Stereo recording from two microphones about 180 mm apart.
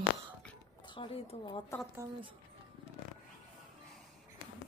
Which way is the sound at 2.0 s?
15° right (ahead or behind).